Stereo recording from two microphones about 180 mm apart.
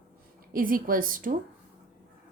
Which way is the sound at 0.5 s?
50° right (ahead or behind).